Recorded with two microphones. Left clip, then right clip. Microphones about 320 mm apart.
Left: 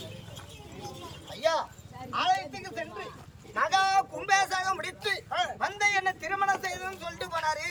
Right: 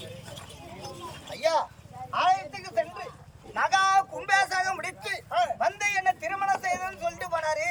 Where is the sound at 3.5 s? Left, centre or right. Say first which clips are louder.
Right 2 dB; centre.